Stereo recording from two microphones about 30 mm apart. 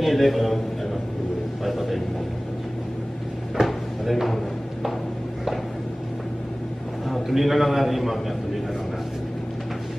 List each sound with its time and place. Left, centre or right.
0.0 s a man's voice: centre
1.6 s vehicle: centre
3.6 s drawer open or close: centre
7.1 s a man's voice: centre